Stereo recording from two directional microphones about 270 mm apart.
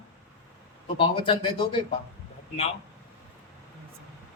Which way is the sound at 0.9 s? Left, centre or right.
Centre.